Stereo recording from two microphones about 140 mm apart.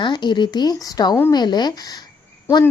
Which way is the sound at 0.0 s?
35° left (ahead or behind).